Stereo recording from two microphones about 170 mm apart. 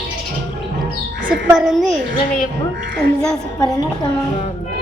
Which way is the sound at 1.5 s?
Centre (ahead or behind).